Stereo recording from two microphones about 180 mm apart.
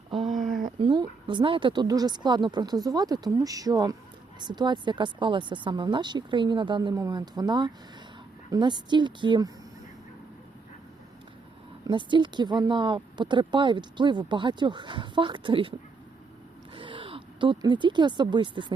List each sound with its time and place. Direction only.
0.1 s a sound: centre (ahead or behind)
0.8 s speech: 25° right (ahead or behind)
11.9 s speech: 25° right (ahead or behind)
16.7 s speech: 30° right (ahead or behind)